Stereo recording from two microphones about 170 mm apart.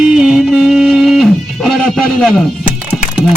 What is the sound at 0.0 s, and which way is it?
Music, 5° right (ahead or behind).